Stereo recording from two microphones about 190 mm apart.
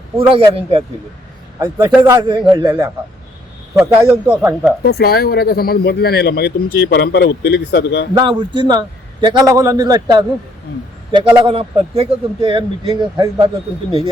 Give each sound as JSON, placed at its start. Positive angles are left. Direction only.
{"t": 0.2, "sound": "speech", "side_deg": -30}
{"t": 1.5, "sound": "speech", "side_deg": -15}
{"t": 2.2, "sound": "speech", "side_deg": -25}
{"t": 3.8, "sound": "speech", "side_deg": -15}
{"t": 4.8, "sound": "speech", "side_deg": 55}
{"t": 8.1, "sound": "speech", "side_deg": -25}